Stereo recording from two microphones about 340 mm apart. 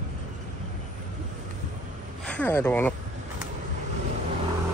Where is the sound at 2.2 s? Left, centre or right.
Centre.